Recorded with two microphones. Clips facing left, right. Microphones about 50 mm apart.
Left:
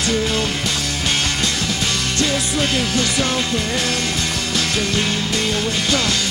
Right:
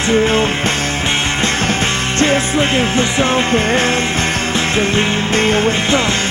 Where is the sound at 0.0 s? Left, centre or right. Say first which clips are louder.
Right 7 dB; right.